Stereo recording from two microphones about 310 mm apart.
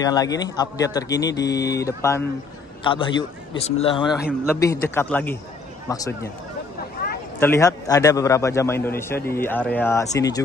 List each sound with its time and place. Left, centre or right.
0.0 s a man's voice: centre
7.0 s a sound: left
7.3 s a man's voice: centre